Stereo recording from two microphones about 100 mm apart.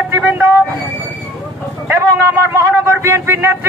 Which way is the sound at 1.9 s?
25° right (ahead or behind).